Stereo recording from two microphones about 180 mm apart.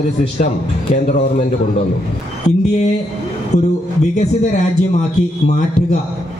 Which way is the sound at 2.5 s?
40° left (ahead or behind).